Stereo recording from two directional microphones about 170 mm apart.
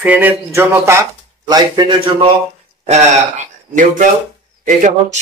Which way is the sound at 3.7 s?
50° right (ahead or behind).